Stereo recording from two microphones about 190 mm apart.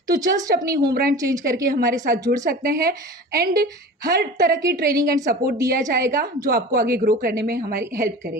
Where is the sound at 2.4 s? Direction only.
50° right (ahead or behind).